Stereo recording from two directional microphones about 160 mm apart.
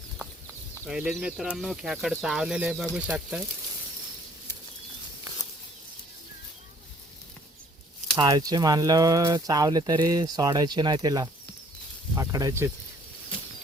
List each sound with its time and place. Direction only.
0.9 s speech: 5° right (ahead or behind)
8.1 s speech: 25° right (ahead or behind)